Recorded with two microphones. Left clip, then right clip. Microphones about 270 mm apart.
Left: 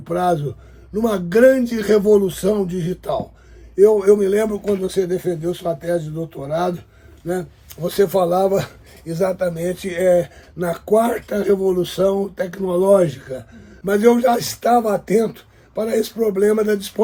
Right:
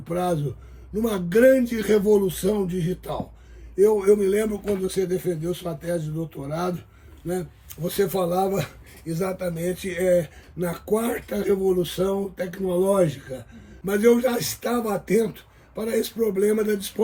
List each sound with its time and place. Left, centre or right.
0.1 s speech: centre